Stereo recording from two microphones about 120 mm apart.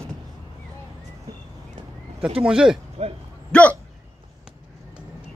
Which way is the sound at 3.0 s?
60° right (ahead or behind).